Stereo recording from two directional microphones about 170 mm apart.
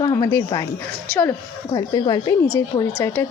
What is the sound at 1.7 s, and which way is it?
Speech, 20° left (ahead or behind).